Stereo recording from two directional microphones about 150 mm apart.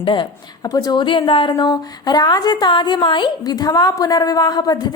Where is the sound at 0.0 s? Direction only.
30° left (ahead or behind).